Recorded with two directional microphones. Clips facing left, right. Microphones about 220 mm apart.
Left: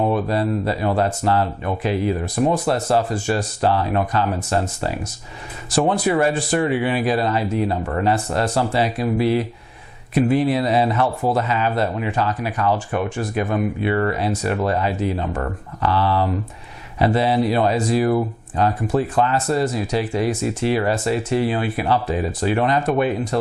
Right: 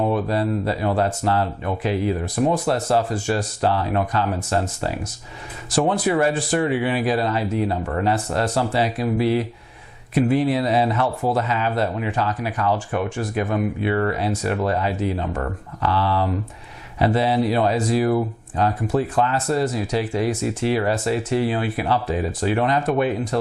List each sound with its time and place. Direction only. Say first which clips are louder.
0.1 s speech: left 1 dB; 20° left (ahead or behind)
5.9 s speech: left 1 dB; 15° left (ahead or behind)